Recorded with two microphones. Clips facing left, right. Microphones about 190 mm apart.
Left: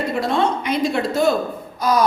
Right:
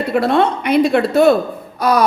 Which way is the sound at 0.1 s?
60° right (ahead or behind).